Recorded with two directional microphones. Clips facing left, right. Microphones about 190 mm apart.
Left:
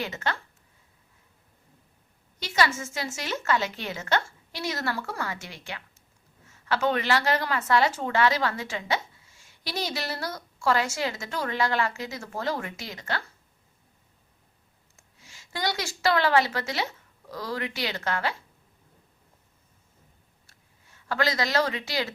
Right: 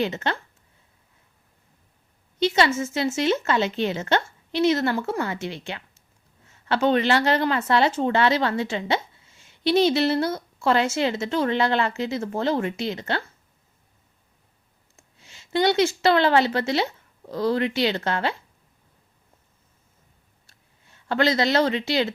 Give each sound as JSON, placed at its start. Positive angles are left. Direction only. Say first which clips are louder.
{"t": 0.0, "sound": "speech", "louder": "right 6 dB", "side_deg": -25}
{"t": 2.4, "sound": "speech", "louder": "right 6 dB", "side_deg": -25}
{"t": 15.2, "sound": "a woman's voice", "louder": "right 10 dB", "side_deg": -25}
{"t": 20.8, "sound": "speech", "louder": "right 6 dB", "side_deg": -25}